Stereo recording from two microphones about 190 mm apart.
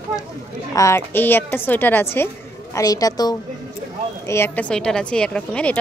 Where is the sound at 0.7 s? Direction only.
15° left (ahead or behind).